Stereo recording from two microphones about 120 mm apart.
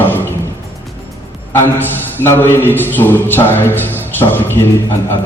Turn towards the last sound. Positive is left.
turn(degrees=20)  # may be behind; listen again after turning